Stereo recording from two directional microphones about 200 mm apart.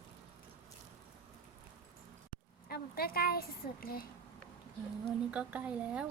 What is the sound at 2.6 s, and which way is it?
A woman's voice, 50° left (ahead or behind).